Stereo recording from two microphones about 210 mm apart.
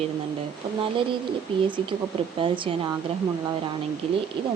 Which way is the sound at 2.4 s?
25° right (ahead or behind).